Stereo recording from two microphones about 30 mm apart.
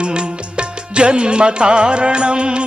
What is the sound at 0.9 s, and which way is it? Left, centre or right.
Music, right.